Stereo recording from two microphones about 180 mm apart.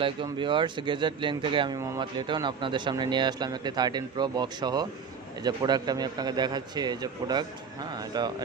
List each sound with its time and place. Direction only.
0.0 s a man's voice: 25° right (ahead or behind)